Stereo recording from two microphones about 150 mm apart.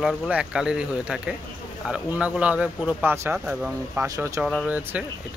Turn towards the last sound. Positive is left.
turn(degrees=-10)  # may be behind; listen again after turning